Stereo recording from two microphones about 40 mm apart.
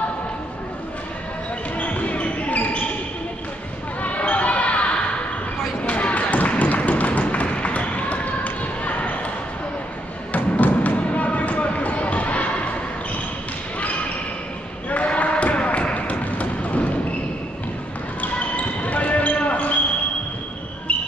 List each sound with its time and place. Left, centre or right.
1.8 s basketball bounce: left
4.0 s basketball bounce: left
5.9 s a sound: left
8.8 s basketball bounce: left
10.3 s music: left
14.9 s basketball bounce: left
18.8 s basketball bounce: left
20.9 s music: left